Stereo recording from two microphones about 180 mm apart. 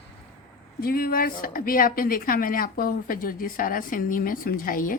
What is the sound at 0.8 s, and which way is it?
Speech, 55° left (ahead or behind).